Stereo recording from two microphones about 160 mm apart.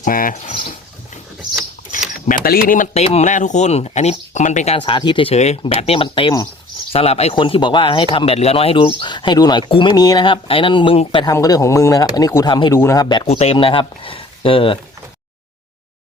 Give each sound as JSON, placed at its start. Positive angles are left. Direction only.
{"t": 0.0, "sound": "a sound", "side_deg": 60}
{"t": 2.2, "sound": "speech", "side_deg": 65}
{"t": 6.9, "sound": "speech", "side_deg": 40}
{"t": 11.3, "sound": "speech", "side_deg": 20}